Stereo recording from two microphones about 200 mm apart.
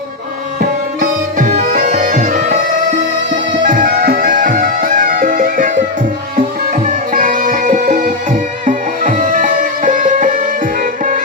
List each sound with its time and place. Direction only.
0.9 s music: 45° right (ahead or behind)
3.6 s music: 40° right (ahead or behind)
6.8 s music: 40° right (ahead or behind)